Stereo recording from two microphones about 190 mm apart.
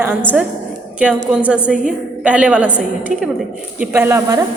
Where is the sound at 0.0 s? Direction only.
10° right (ahead or behind).